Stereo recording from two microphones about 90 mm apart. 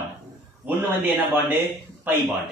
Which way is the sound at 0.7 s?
20° right (ahead or behind).